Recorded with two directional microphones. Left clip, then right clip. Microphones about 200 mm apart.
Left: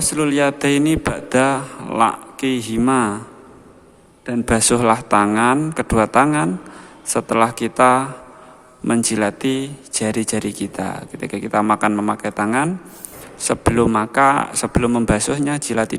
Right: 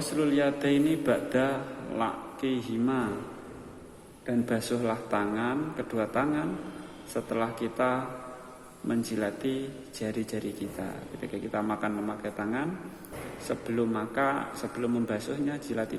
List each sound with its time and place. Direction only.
0.1 s speech: 35° left (ahead or behind)
4.3 s speech: 45° left (ahead or behind)